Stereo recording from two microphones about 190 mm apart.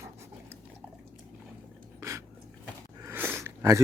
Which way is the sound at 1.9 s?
15° right (ahead or behind).